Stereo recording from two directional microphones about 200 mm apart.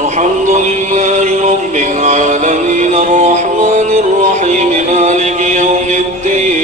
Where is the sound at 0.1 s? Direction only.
35° right (ahead or behind).